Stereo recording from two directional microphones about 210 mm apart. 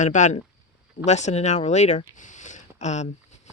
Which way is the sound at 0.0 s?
35° left (ahead or behind).